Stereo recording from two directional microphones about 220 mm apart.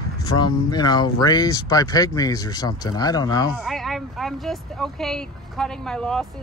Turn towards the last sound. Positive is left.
turn(degrees=5)  # may be behind; listen again after turning